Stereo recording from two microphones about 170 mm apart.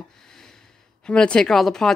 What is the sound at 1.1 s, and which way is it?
Speech, 5° left (ahead or behind).